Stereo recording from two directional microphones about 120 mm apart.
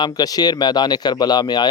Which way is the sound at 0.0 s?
35° left (ahead or behind).